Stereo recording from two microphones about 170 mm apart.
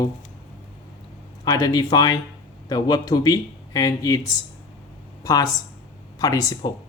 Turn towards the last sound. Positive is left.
turn(degrees=20)  # may be behind; listen again after turning